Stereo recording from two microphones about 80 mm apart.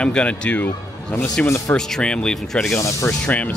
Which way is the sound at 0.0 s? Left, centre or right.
Centre.